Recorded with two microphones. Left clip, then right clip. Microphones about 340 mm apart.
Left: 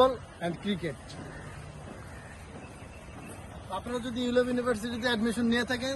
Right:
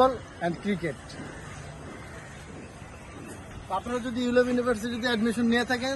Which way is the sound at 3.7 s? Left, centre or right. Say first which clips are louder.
Right 4 dB; centre.